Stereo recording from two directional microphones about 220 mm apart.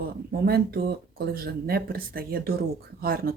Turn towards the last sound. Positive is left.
turn(degrees=-45)  # may be behind; listen again after turning